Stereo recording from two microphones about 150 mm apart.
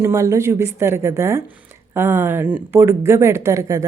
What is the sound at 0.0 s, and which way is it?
A woman's voice, 20° right (ahead or behind).